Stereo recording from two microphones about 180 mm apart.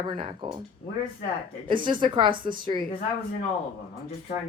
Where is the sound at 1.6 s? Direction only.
25° right (ahead or behind).